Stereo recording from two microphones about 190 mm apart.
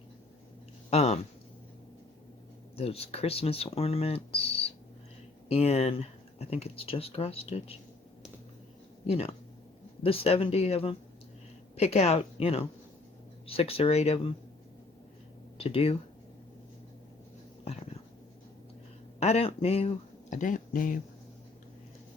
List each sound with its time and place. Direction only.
0.9 s speech: 35° left (ahead or behind)
2.7 s speech: 30° left (ahead or behind)
9.0 s speech: 30° left (ahead or behind)
15.5 s speech: 30° left (ahead or behind)
19.2 s speech: 35° left (ahead or behind)